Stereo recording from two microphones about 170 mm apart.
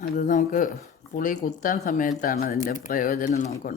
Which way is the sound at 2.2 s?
60° left (ahead or behind).